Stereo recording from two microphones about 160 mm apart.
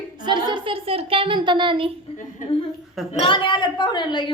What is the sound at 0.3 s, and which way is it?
A woman's voice, 30° right (ahead or behind).